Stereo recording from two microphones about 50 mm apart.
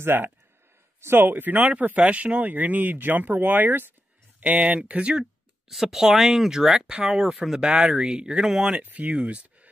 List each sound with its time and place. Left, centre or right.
0.0 s speech: right
4.4 s speech: right
5.7 s speech: centre
8.8 s speech: right